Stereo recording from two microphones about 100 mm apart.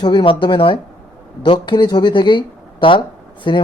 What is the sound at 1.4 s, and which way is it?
Speech, 50° left (ahead or behind).